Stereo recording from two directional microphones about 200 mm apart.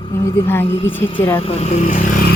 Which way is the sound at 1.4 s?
30° left (ahead or behind).